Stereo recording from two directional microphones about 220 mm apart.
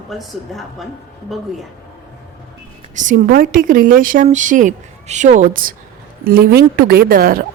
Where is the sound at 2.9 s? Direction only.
35° right (ahead or behind).